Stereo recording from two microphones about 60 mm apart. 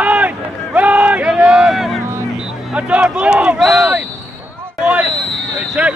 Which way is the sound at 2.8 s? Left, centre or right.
Right.